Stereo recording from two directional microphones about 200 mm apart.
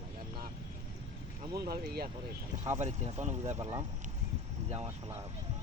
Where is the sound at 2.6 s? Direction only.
35° right (ahead or behind).